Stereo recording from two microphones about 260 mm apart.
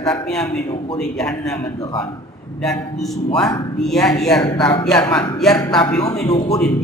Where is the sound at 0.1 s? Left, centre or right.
Centre.